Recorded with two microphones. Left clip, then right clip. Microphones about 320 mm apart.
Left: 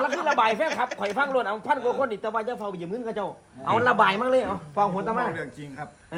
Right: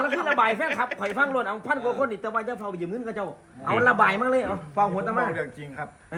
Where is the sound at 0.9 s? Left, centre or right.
Left.